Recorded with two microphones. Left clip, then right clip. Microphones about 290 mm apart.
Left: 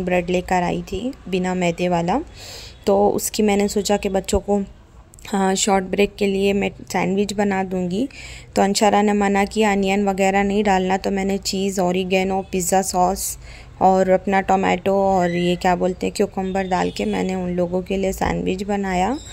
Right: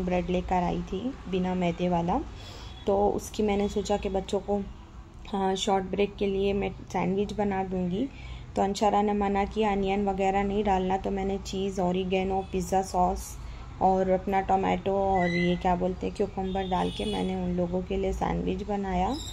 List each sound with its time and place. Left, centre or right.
0.0 s speech: left